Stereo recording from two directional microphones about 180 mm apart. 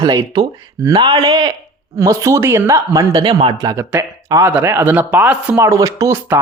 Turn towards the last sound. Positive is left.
turn(degrees=-10)  # may be behind; listen again after turning